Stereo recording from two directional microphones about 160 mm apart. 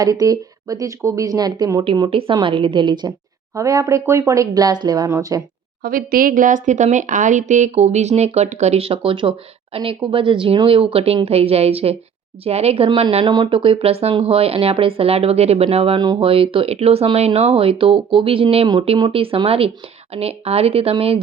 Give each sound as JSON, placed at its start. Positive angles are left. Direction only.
{"t": 0.0, "sound": "speech", "side_deg": -20}
{"t": 1.8, "sound": "speech", "side_deg": -35}
{"t": 5.8, "sound": "speech", "side_deg": -65}